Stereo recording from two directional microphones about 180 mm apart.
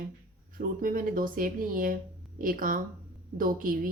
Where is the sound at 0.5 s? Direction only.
50° right (ahead or behind).